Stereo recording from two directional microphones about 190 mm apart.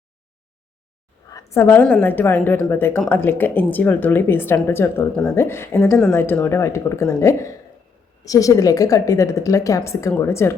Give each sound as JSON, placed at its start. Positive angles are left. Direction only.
{"t": 1.3, "sound": "a woman's voice", "side_deg": 15}